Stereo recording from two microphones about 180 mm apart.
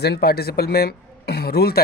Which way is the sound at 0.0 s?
65° left (ahead or behind).